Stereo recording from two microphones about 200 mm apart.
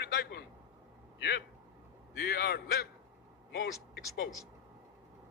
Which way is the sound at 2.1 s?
55° left (ahead or behind).